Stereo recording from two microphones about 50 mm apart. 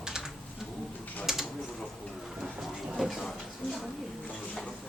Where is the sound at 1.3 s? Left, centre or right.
Centre.